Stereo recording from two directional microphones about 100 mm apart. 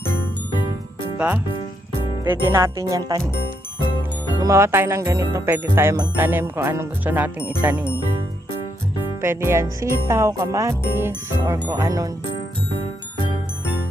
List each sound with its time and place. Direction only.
2.2 s speech: 25° right (ahead or behind)
4.4 s music: 30° right (ahead or behind)
9.2 s music: 25° right (ahead or behind)
11.6 s speech: 40° right (ahead or behind)